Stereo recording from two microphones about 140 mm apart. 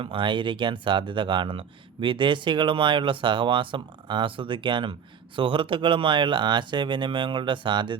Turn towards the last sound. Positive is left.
turn(degrees=-35)  # may be behind; listen again after turning